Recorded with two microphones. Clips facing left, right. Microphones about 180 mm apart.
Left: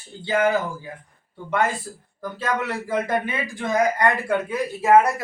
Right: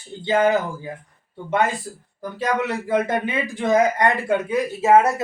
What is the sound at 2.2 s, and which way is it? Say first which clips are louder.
A man's voice: right 3 dB; 15° right (ahead or behind).